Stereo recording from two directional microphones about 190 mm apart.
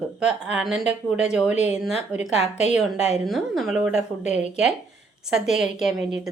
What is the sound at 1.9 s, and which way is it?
Speech, 35° left (ahead or behind).